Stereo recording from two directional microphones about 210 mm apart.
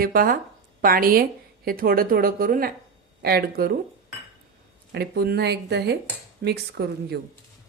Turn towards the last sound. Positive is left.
turn(degrees=-50)  # may be behind; listen again after turning